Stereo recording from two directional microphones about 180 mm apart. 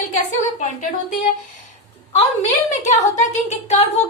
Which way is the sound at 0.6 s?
45° left (ahead or behind).